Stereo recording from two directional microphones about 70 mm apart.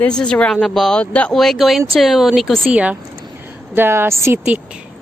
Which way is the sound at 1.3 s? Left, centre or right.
Centre.